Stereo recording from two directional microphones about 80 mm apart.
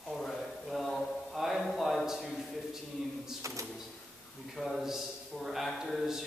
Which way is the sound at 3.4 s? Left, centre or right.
Right.